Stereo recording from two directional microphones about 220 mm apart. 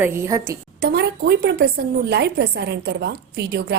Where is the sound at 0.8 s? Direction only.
50° right (ahead or behind).